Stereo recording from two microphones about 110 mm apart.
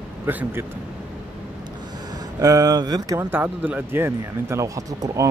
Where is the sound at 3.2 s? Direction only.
15° right (ahead or behind).